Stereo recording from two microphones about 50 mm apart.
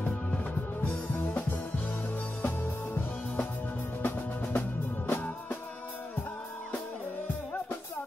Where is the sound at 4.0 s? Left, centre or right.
Left.